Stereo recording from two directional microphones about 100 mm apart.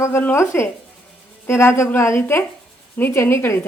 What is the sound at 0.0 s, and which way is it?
Speech, 25° left (ahead or behind).